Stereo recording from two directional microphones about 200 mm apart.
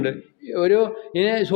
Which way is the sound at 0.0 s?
15° left (ahead or behind).